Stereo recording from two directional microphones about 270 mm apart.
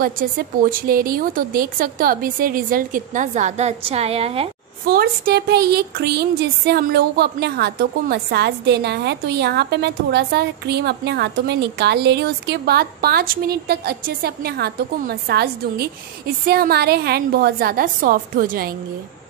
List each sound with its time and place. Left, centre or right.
0.0 s speech: right
4.8 s speech: right